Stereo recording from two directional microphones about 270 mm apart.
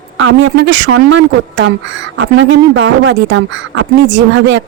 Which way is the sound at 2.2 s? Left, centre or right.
Right.